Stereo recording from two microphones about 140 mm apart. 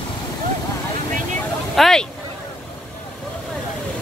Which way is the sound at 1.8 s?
5° left (ahead or behind).